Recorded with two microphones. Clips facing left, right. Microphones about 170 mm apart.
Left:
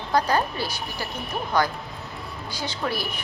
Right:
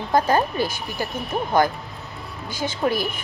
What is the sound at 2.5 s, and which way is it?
Speech, 50° right (ahead or behind).